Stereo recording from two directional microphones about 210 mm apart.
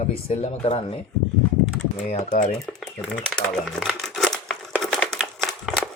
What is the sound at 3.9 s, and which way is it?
Crumpling, centre (ahead or behind).